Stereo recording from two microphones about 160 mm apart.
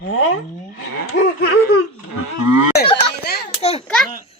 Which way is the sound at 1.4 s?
75° left (ahead or behind).